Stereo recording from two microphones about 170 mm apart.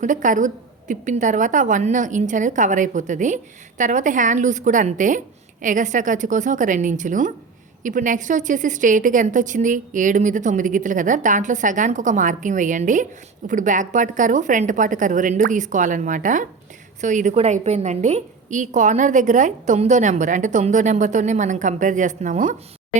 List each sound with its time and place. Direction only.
0.0 s a woman's voice: 50° right (ahead or behind)